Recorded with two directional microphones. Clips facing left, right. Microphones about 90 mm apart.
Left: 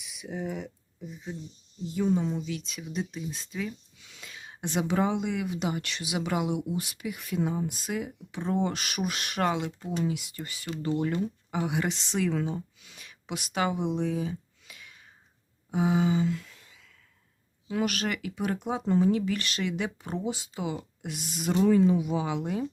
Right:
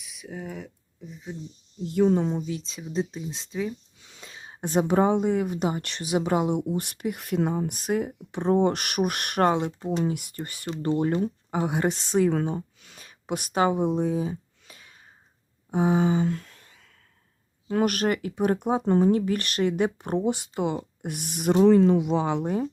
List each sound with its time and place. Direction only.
0.0 s speech: centre (ahead or behind)
1.8 s speech: 70° right (ahead or behind); by 2.5 s 50° right (ahead or behind)
2.5 s speech: 30° right (ahead or behind)
4.2 s a sound: 30° right (ahead or behind)
4.6 s speech: 45° right (ahead or behind)
9.5 s speech: 40° right (ahead or behind)
10.0 s speech: 50° right (ahead or behind)
11.0 s speech: 35° right (ahead or behind)
15.7 s a sound: 40° right (ahead or behind)
17.7 s speech: 50° right (ahead or behind)
21.7 s speech: 70° right (ahead or behind)